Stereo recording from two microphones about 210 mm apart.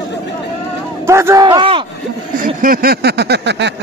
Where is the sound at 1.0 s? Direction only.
15° right (ahead or behind).